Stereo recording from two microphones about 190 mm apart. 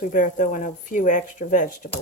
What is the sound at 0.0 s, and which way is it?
Speech, 45° left (ahead or behind).